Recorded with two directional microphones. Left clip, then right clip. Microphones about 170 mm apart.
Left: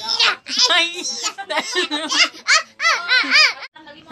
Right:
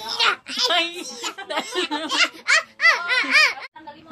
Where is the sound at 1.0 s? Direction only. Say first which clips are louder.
Left 6 dB; 10° right (ahead or behind).